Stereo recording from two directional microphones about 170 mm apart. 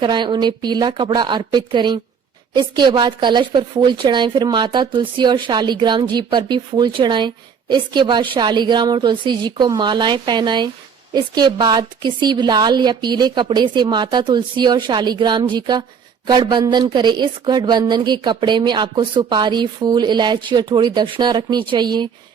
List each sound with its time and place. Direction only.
0.0 s a woman's voice: 25° right (ahead or behind)